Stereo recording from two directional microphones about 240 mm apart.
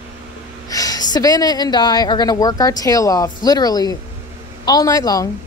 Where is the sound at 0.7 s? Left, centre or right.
Centre.